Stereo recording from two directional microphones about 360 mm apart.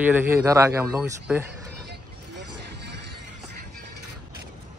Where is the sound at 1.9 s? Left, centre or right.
Right.